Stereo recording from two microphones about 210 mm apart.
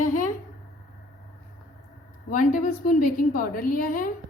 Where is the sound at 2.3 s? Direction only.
40° left (ahead or behind).